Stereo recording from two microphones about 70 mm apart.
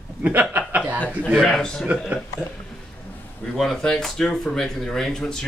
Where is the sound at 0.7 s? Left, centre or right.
Centre.